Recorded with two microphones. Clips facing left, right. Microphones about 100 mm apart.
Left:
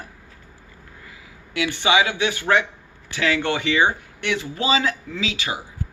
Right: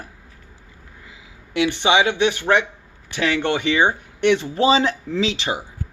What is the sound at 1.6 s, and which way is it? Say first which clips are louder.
A man's voice: right 2 dB; 25° right (ahead or behind).